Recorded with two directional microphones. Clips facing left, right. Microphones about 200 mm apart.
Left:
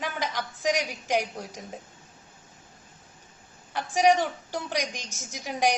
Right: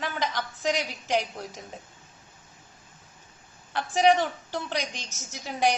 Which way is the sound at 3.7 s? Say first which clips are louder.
Even; 10° left (ahead or behind).